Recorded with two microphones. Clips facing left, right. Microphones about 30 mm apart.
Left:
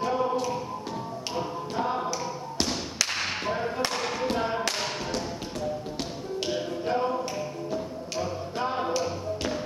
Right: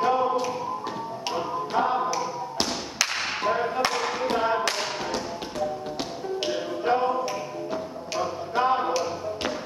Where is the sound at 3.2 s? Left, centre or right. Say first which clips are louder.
Right 4 dB; centre.